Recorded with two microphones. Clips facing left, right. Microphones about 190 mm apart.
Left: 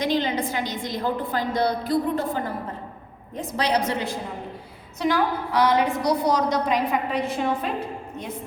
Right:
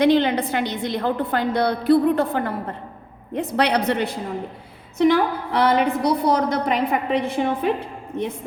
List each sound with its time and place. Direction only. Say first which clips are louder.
0.0 s a woman's voice: right 6 dB; 60° right (ahead or behind)